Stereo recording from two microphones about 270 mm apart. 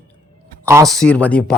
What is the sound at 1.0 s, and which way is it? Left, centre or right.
Speech, centre.